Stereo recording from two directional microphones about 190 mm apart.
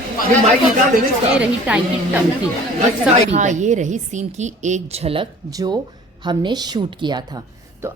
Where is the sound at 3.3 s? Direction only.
40° right (ahead or behind).